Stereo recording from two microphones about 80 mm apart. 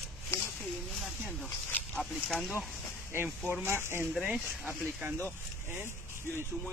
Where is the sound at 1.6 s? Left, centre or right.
Left.